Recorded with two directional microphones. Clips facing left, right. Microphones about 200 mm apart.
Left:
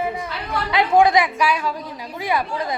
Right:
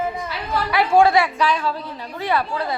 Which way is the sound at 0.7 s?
15° left (ahead or behind).